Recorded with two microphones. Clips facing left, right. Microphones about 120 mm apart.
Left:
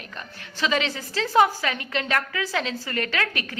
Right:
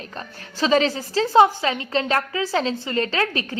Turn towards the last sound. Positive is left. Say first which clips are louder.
# right 4 dB
turn(degrees=-30)  # may be behind; listen again after turning